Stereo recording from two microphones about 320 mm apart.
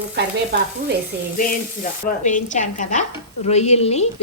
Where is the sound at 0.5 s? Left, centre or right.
Right.